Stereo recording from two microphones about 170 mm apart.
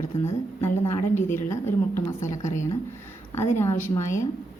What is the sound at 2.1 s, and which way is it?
Speech, 15° left (ahead or behind).